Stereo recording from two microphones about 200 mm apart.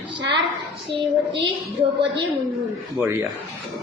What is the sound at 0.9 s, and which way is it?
Child singing, 25° right (ahead or behind).